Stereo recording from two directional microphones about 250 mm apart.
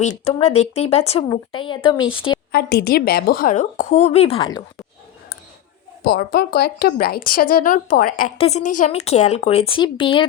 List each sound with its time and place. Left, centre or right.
0.0 s speech: left
2.5 s a woman's voice: left
6.0 s a woman's voice: left; by 10.2 s centre